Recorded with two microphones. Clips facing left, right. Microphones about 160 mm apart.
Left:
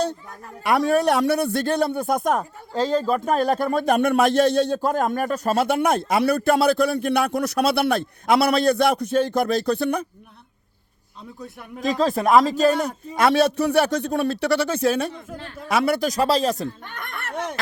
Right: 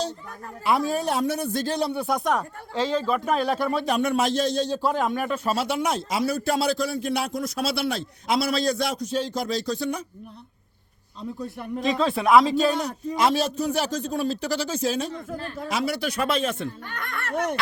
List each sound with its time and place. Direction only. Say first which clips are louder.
0.6 s speech: left 5 dB; 65° left (ahead or behind)
11.4 s speech: right 6 dB; centre (ahead or behind)
11.8 s speech: left 3 dB; 40° left (ahead or behind)